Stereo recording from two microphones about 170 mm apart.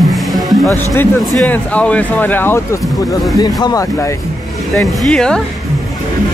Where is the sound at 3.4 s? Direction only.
25° left (ahead or behind).